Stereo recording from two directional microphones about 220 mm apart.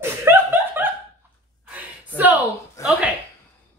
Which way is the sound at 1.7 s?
10° right (ahead or behind).